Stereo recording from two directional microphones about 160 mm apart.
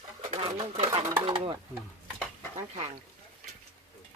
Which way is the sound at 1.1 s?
30° right (ahead or behind).